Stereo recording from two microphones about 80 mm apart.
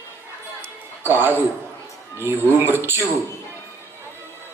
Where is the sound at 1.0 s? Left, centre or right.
Right.